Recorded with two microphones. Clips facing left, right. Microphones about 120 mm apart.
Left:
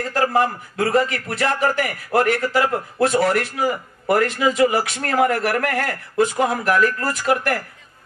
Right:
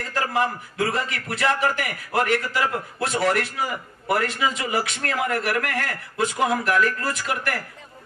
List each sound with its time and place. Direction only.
0.1 s a man's voice: 45° left (ahead or behind)